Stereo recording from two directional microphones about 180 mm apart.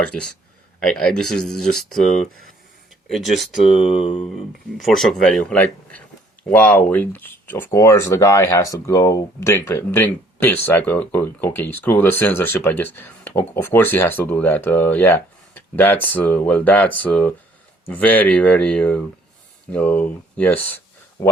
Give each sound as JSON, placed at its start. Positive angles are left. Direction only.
{"t": 0.0, "sound": "speech", "side_deg": 5}
{"t": 3.8, "sound": "a sound", "side_deg": 30}
{"t": 4.4, "sound": "speech", "side_deg": 0}